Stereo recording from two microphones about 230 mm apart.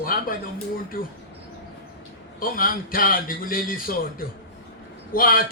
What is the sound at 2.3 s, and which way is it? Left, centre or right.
A man's voice, left.